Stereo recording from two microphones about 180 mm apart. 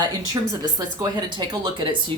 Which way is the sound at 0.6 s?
20° right (ahead or behind).